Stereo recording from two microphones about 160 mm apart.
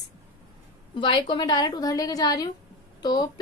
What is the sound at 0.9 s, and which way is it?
A woman's voice, 30° left (ahead or behind).